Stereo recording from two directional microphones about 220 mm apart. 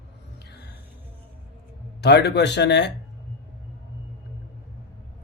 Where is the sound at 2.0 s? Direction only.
50° left (ahead or behind).